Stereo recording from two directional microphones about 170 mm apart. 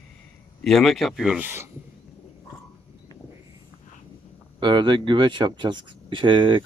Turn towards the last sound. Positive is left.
turn(degrees=-30)  # may be behind; listen again after turning